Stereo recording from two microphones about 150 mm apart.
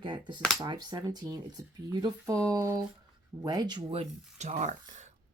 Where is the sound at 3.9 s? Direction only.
45° right (ahead or behind).